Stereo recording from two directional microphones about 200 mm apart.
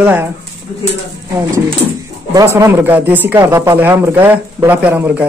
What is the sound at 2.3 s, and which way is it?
Speech, 15° right (ahead or behind).